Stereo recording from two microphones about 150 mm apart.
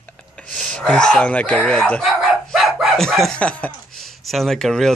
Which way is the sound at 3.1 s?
5° left (ahead or behind).